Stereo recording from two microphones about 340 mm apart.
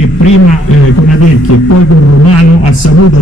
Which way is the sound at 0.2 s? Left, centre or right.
Left.